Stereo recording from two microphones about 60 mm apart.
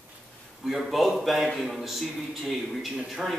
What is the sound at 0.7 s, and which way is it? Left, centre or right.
A man's voice, centre.